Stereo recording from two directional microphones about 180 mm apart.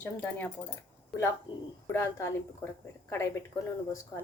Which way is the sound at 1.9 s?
15° left (ahead or behind).